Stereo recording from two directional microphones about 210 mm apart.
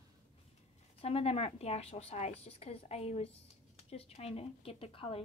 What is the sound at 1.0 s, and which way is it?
Speech, 30° left (ahead or behind).